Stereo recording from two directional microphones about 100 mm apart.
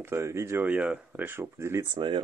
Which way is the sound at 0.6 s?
10° right (ahead or behind).